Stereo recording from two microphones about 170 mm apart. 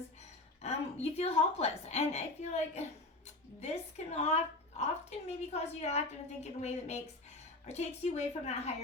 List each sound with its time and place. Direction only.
0.2 s a woman's voice: 40° left (ahead or behind)